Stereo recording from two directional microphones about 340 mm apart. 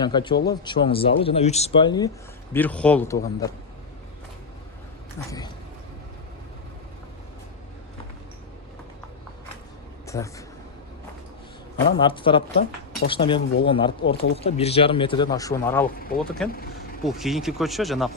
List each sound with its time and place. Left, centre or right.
0.0 s a man's voice: centre
10.1 s a man's voice: centre
11.9 s a man's voice: centre
14.0 s speech: left
14.4 s a man's voice: centre
16.5 s speech: left
17.0 s speech: centre